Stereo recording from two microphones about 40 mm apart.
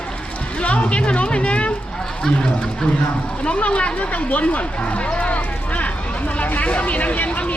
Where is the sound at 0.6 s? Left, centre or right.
Left.